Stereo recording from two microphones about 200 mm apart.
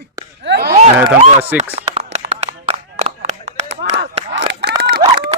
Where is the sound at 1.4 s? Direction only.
10° right (ahead or behind).